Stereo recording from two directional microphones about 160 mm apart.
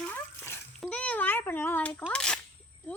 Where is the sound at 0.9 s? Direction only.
10° left (ahead or behind).